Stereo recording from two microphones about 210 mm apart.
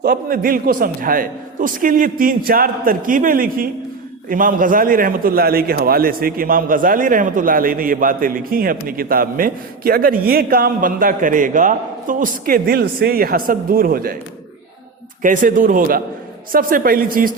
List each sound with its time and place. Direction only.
0.0 s a man's voice: 45° right (ahead or behind)
15.2 s a man's voice: 40° right (ahead or behind)